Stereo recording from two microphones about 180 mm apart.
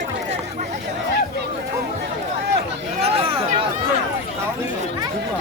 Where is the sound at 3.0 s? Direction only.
35° right (ahead or behind).